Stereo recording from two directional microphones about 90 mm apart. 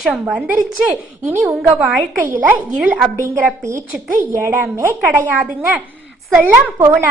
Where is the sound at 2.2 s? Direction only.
25° right (ahead or behind).